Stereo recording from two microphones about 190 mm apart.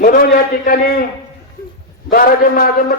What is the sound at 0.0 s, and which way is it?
A man's voice, 45° left (ahead or behind).